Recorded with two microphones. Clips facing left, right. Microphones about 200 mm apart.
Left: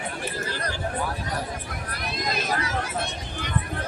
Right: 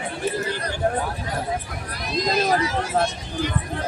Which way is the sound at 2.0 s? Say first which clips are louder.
Right 8 dB; 60° left (ahead or behind).